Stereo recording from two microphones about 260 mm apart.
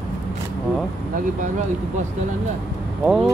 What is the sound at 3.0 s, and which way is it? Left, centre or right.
Speech, centre.